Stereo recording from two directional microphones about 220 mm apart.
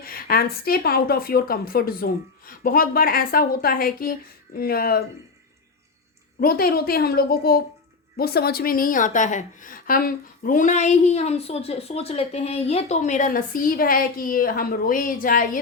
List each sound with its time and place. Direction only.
0.0 s speech: 40° left (ahead or behind)
6.4 s a woman's voice: 40° left (ahead or behind)